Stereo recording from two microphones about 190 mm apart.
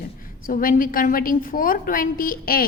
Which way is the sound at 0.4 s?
45° left (ahead or behind).